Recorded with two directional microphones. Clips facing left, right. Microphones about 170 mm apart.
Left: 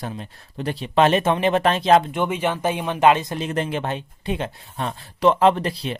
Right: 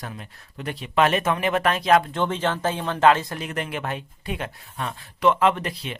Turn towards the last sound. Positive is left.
turn(degrees=35)  # may be behind; listen again after turning